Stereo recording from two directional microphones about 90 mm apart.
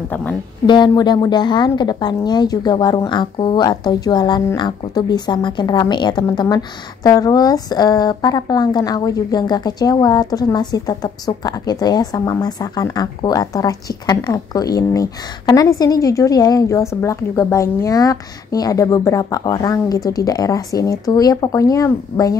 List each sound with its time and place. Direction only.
0.1 s speech: 20° left (ahead or behind)
0.7 s a woman's voice: 55° left (ahead or behind)
6.4 s a woman's voice: 45° left (ahead or behind)